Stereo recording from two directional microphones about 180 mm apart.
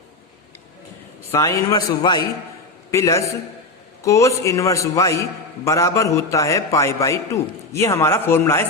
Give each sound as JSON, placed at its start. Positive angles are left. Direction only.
{"t": 1.3, "sound": "a man's voice", "side_deg": 15}